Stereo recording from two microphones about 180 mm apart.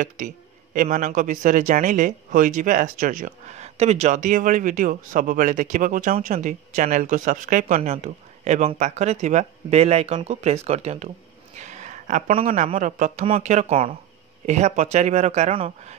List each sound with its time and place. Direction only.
0.7 s a man's voice: 45° right (ahead or behind)
11.5 s a sound: 40° right (ahead or behind)
12.4 s speech: 35° right (ahead or behind)